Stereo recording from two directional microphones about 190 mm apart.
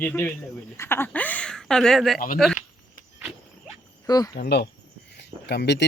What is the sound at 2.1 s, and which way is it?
Speech, 50° left (ahead or behind).